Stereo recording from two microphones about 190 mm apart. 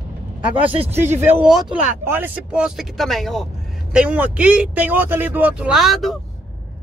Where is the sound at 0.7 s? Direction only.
30° right (ahead or behind).